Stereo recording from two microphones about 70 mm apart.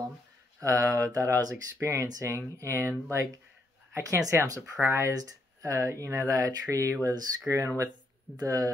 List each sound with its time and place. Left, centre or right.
0.6 s speech: right
4.0 s speech: right